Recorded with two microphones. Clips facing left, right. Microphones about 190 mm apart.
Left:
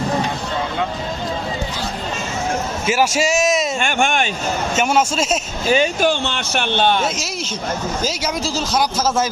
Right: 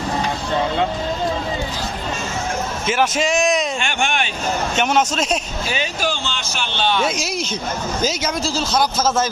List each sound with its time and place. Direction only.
2.8 s a man's voice: 10° left (ahead or behind)
3.8 s speech: 45° left (ahead or behind)
4.8 s a man's voice: 5° left (ahead or behind)
5.6 s speech: 45° left (ahead or behind)
8.0 s a man's voice: 10° left (ahead or behind)